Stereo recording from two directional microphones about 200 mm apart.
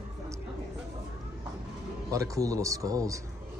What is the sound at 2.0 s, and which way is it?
Speech, 15° right (ahead or behind).